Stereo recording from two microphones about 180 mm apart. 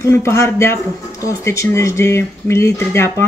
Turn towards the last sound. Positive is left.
turn(degrees=15)  # may be behind; listen again after turning